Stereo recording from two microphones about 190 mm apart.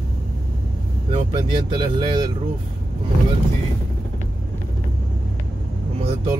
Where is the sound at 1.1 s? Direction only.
25° right (ahead or behind).